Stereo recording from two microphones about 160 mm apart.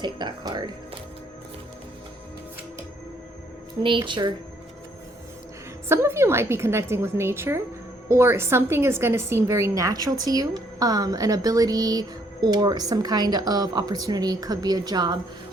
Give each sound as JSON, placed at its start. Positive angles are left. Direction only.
{"t": 0.0, "sound": "a woman's voice", "side_deg": -30}
{"t": 3.8, "sound": "speech", "side_deg": -30}
{"t": 5.9, "sound": "a woman's voice", "side_deg": -15}